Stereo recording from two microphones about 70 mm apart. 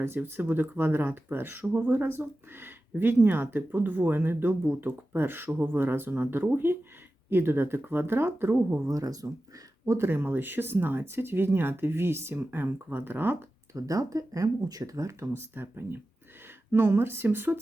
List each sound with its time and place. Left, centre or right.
0.0 s speech: right
8.9 s speech: right
9.8 s speech: right
10.1 s speech: right
13.7 s speech: right